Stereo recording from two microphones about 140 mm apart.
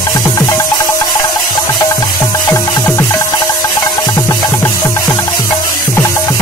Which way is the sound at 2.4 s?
15° left (ahead or behind).